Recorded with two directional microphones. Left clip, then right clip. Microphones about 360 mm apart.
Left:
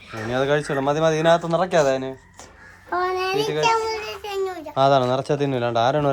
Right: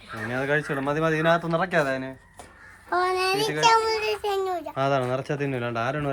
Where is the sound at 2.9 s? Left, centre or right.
Right.